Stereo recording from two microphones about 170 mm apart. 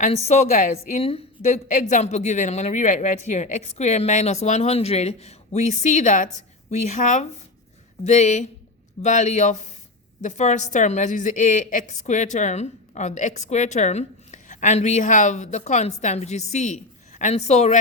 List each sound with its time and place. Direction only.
0.0 s a woman's voice: 40° left (ahead or behind)